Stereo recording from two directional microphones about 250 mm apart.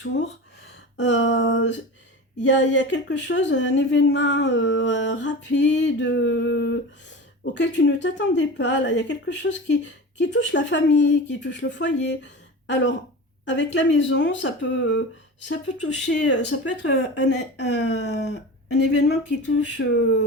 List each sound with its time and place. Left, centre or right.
0.9 s a woman's voice: left